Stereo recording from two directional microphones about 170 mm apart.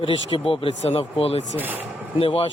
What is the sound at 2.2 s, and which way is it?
Speech, 35° left (ahead or behind).